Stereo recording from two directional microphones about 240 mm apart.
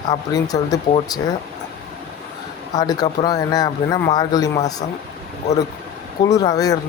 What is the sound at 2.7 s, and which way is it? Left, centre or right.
Speech, centre.